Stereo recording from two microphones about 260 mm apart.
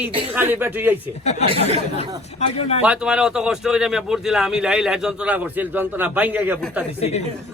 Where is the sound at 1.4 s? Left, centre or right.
Right.